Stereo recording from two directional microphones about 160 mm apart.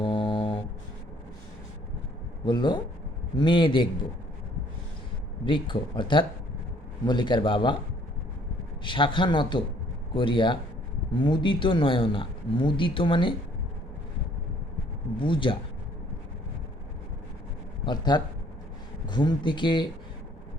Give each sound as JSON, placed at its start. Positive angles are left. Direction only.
{"t": 0.0, "sound": "mantra", "side_deg": 30}
{"t": 2.4, "sound": "speech", "side_deg": 30}
{"t": 5.5, "sound": "speech", "side_deg": 30}
{"t": 8.8, "sound": "speech", "side_deg": 30}
{"t": 15.2, "sound": "speech", "side_deg": 30}
{"t": 17.8, "sound": "speech", "side_deg": 25}